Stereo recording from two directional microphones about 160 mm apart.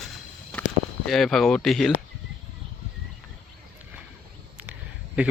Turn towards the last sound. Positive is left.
turn(degrees=-10)  # may be behind; listen again after turning